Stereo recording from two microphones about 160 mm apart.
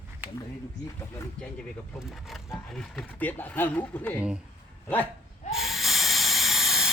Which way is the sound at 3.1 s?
10° left (ahead or behind).